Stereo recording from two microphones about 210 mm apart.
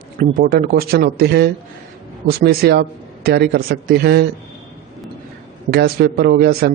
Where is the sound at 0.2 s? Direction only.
45° right (ahead or behind).